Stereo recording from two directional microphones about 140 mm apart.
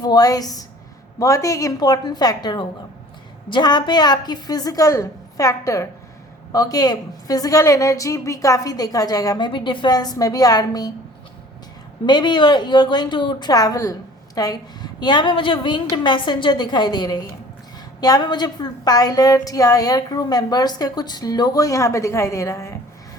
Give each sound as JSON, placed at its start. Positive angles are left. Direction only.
{"t": 0.0, "sound": "a woman's voice", "side_deg": 25}
{"t": 12.0, "sound": "a woman's voice", "side_deg": 35}